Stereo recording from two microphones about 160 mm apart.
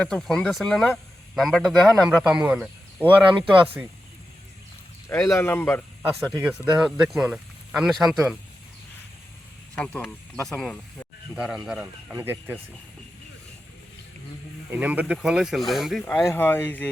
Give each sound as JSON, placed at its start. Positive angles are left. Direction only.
{"t": 0.0, "sound": "a man's voice", "side_deg": 5}
{"t": 3.5, "sound": "speech", "side_deg": -30}
{"t": 5.0, "sound": "speech", "side_deg": 15}
{"t": 6.4, "sound": "a man's voice", "side_deg": -5}
{"t": 9.7, "sound": "a man's voice", "side_deg": 5}
{"t": 14.7, "sound": "a man's voice", "side_deg": -10}
{"t": 16.2, "sound": "speech", "side_deg": 15}